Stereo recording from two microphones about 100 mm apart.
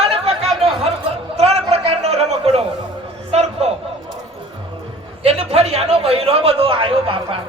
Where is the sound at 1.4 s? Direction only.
90° right.